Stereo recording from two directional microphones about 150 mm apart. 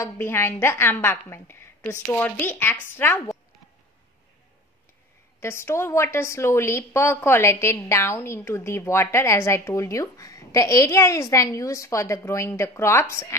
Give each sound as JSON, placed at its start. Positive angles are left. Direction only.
{"t": 0.0, "sound": "a woman's voice", "side_deg": 15}
{"t": 5.4, "sound": "a woman's voice", "side_deg": 15}